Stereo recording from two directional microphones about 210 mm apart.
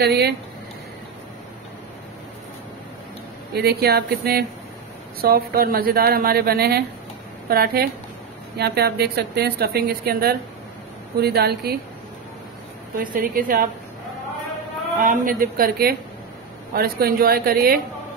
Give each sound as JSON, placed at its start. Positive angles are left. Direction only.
{"t": 0.0, "sound": "a woman's voice", "side_deg": -50}
{"t": 3.5, "sound": "a woman's voice", "side_deg": -50}
{"t": 12.9, "sound": "a woman's voice", "side_deg": -40}
{"t": 15.0, "sound": "a woman's voice", "side_deg": -40}